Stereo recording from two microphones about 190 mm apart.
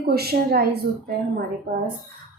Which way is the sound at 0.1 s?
55° right (ahead or behind).